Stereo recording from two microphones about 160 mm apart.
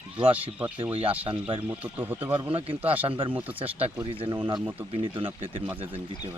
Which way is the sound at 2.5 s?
35° right (ahead or behind).